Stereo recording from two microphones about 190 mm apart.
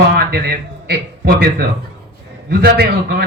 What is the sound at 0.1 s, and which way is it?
A man's voice, 55° right (ahead or behind).